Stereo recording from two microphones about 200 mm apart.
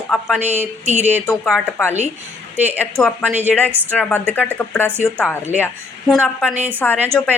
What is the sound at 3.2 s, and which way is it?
Speech, 10° right (ahead or behind).